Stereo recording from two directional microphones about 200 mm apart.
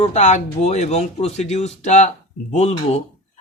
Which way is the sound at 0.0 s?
35° left (ahead or behind).